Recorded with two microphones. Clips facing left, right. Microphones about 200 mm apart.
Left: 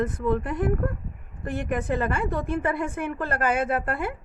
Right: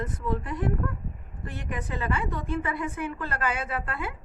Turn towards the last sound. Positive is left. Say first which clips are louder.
# left 7 dB
turn(degrees=50)  # may be behind; listen again after turning